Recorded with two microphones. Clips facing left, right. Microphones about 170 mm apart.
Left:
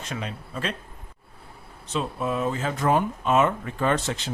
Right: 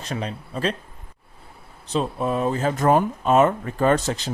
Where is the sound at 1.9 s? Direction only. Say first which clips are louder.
Right 4 dB; 35° right (ahead or behind).